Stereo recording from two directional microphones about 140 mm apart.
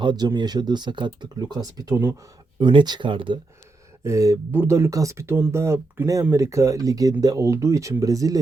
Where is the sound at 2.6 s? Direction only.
35° right (ahead or behind).